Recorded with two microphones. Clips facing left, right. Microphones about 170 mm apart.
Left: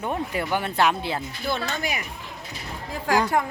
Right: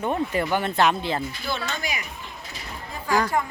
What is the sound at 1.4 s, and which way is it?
Speech, 55° left (ahead or behind).